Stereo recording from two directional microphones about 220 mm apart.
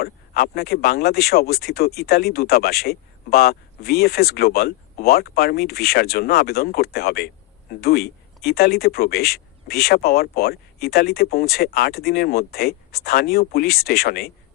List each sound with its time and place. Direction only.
0.0 s speech: 45° left (ahead or behind)